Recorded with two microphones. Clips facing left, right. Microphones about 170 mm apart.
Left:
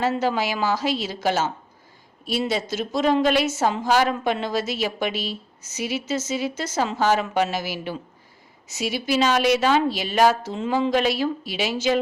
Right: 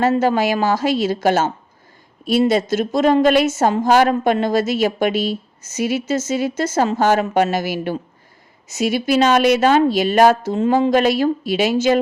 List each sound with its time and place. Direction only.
0.0 s a woman's voice: 50° right (ahead or behind)